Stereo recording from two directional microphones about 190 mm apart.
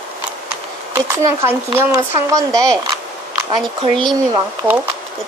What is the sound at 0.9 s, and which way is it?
Speech, 15° right (ahead or behind).